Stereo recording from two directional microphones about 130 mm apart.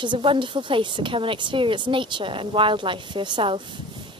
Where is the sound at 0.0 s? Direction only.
40° right (ahead or behind).